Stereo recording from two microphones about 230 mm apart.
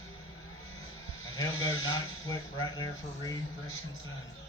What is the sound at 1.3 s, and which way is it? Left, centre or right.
Speech, centre.